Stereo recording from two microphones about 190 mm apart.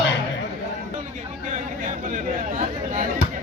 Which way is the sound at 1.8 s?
45° right (ahead or behind).